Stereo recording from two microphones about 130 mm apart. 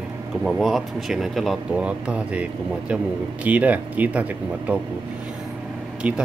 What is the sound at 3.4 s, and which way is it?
Speech, 10° right (ahead or behind).